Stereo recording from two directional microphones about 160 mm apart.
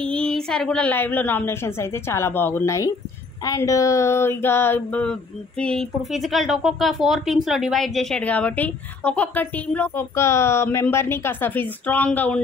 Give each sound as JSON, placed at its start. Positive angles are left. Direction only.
{"t": 0.0, "sound": "a woman's voice", "side_deg": 5}